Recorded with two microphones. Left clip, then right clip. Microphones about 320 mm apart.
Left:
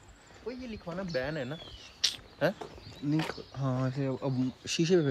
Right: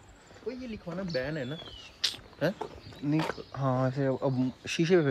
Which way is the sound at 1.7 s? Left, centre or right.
Centre.